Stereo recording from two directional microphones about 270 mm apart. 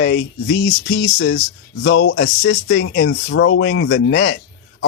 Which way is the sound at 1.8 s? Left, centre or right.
Left.